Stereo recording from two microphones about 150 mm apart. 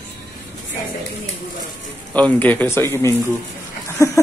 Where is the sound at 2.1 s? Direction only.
10° left (ahead or behind).